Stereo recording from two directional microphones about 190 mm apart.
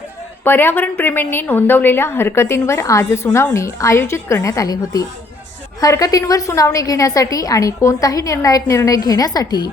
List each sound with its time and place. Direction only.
0.4 s a woman's voice: 10° left (ahead or behind)